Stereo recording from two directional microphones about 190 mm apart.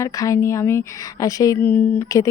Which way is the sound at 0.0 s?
15° left (ahead or behind).